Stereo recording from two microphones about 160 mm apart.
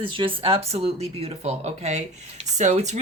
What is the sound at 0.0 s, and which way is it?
Speech, 30° right (ahead or behind).